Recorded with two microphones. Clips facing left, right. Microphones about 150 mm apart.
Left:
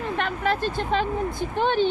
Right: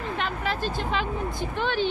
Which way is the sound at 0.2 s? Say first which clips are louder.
Left 5 dB; 55° left (ahead or behind).